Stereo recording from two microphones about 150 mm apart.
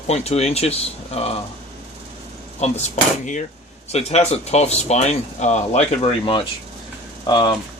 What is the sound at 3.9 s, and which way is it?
Speech, 45° left (ahead or behind).